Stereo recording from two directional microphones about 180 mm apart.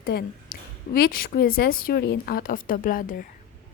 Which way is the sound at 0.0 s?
55° left (ahead or behind).